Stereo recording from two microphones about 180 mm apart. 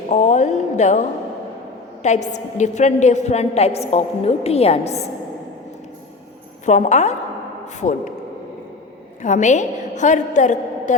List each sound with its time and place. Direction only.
0.1 s a woman's voice: 40° left (ahead or behind)
6.7 s a woman's voice: 40° left (ahead or behind)
9.2 s a woman's voice: 40° left (ahead or behind)